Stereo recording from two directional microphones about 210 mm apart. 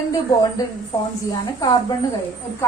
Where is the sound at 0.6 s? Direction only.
15° left (ahead or behind).